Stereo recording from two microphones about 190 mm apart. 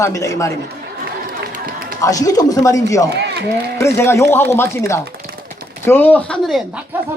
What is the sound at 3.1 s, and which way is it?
Run, 60° right (ahead or behind).